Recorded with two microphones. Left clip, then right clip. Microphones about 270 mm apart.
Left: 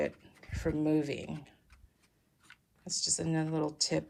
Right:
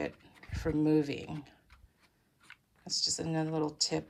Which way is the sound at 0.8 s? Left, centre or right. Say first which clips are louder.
Right 3 dB; centre.